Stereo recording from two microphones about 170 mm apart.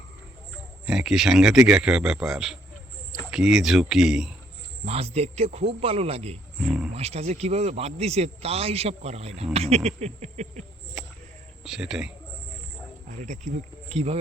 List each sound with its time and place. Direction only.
0.9 s speech: 5° right (ahead or behind)
4.9 s speech: 35° right (ahead or behind)
6.7 s speech: 5° right (ahead or behind)
6.9 s speech: 40° right (ahead or behind)
11.0 s a sound: 5° right (ahead or behind)
11.6 s speech: centre (ahead or behind)
13.2 s speech: 45° right (ahead or behind)